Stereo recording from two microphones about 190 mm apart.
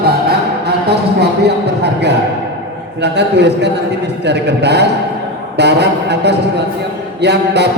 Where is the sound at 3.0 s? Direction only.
65° right (ahead or behind).